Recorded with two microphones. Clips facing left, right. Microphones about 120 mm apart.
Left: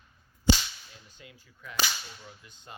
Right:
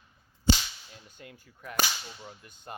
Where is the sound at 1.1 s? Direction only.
50° right (ahead or behind).